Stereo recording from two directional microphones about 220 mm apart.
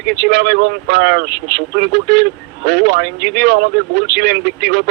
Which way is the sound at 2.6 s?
45° right (ahead or behind).